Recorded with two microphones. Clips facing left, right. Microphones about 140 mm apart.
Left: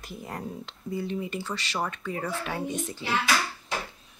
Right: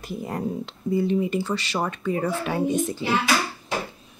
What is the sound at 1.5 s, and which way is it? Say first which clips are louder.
Speech: right 6 dB; 10° right (ahead or behind).